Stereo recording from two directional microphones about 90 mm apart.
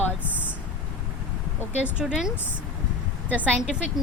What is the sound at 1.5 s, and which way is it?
Speech, 15° right (ahead or behind).